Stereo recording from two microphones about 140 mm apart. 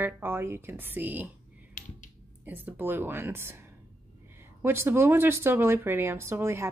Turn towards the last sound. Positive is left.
turn(degrees=-20)  # may be behind; listen again after turning